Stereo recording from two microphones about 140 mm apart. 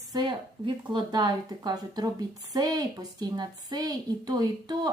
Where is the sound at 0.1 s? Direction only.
35° right (ahead or behind).